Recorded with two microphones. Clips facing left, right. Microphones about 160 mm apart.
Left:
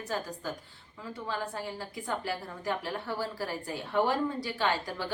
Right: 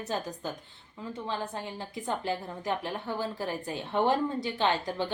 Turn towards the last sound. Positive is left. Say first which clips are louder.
# right 3 dB
turn(degrees=-20)  # may be behind; listen again after turning